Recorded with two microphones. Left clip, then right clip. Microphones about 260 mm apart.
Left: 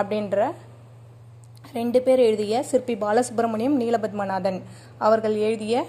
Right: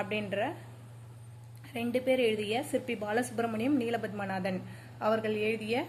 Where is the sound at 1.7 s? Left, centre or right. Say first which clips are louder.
Left 10 dB; left.